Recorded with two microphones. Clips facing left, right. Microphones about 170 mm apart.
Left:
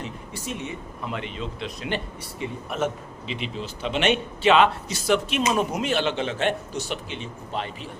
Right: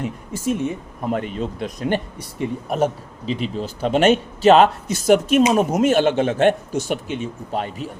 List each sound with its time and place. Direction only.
0.0 s speech: 50° right (ahead or behind)